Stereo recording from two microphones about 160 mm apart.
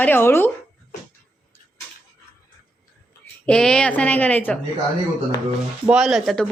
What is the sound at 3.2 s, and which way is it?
Speech, 10° left (ahead or behind).